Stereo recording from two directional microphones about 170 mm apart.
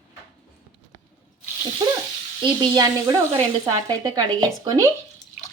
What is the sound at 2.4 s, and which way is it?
Speech, 25° right (ahead or behind).